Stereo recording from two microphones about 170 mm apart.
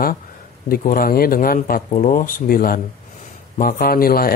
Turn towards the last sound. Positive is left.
turn(degrees=60)  # may be behind; listen again after turning